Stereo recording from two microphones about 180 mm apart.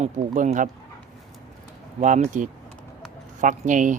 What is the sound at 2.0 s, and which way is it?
Speech, 45° right (ahead or behind).